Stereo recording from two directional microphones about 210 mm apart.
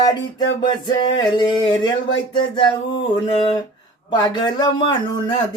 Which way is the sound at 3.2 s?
20° left (ahead or behind).